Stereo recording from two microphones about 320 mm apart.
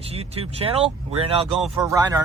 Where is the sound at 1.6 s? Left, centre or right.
Centre.